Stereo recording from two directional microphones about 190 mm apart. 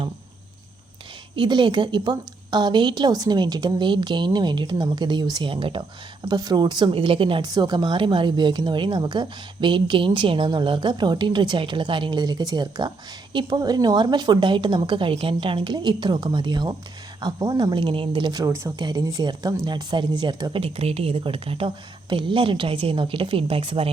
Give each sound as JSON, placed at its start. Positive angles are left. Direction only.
{"t": 1.4, "sound": "speech", "side_deg": -25}